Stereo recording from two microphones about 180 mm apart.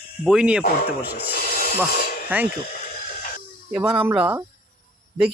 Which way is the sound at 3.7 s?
5° right (ahead or behind).